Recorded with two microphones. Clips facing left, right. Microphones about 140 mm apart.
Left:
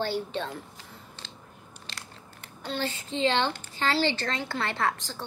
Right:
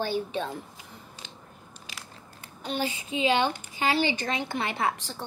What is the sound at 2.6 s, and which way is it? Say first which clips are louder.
Speech: right 1 dB; 15° right (ahead or behind).